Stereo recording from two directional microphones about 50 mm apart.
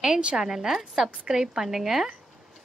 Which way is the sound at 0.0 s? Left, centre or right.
Centre.